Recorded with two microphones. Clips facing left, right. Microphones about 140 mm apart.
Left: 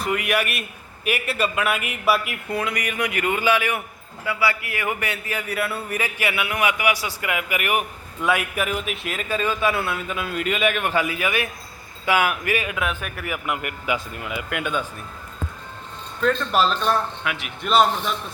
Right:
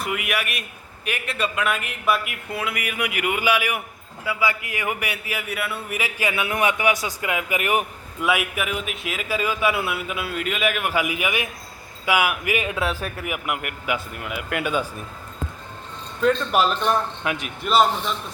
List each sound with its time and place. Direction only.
0.0 s a man's voice: centre (ahead or behind)
6.2 s a man's voice: 25° right (ahead or behind)
8.2 s a man's voice: 5° right (ahead or behind)
12.6 s speech: 30° right (ahead or behind)
13.2 s a man's voice: 10° right (ahead or behind)
16.2 s a man's voice: 15° right (ahead or behind)
17.2 s speech: 35° right (ahead or behind)
17.6 s speech: centre (ahead or behind)